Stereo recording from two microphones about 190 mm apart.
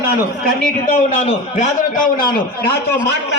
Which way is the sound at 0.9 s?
40° left (ahead or behind).